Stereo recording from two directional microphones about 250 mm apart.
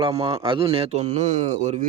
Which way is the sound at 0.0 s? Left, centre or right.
Centre.